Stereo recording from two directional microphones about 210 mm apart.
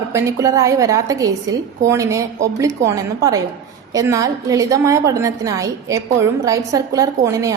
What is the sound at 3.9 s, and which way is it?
A woman's voice, 15° right (ahead or behind).